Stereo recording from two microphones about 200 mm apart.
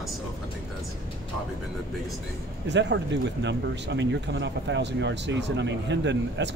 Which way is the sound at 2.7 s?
60° right (ahead or behind).